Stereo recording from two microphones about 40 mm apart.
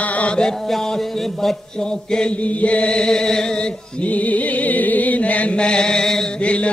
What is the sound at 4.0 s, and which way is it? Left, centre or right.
Music, left.